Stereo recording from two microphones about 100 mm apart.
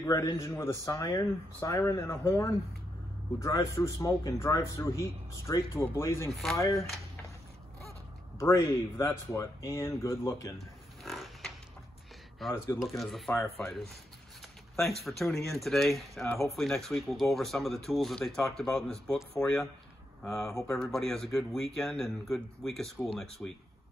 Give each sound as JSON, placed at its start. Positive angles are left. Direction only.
{"t": 0.0, "sound": "speech", "side_deg": 30}
{"t": 8.4, "sound": "speech", "side_deg": 30}
{"t": 11.1, "sound": "pig", "side_deg": 0}
{"t": 12.4, "sound": "speech", "side_deg": 0}